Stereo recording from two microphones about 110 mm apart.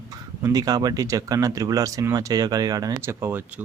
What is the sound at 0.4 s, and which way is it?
Speech, 35° right (ahead or behind).